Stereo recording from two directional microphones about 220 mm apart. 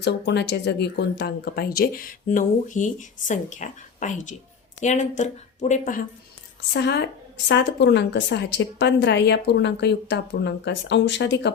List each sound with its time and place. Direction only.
0.0 s speech: 50° left (ahead or behind)
6.7 s a woman's voice: 50° left (ahead or behind)